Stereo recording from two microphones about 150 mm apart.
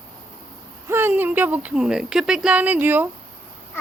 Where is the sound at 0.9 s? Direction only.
15° right (ahead or behind).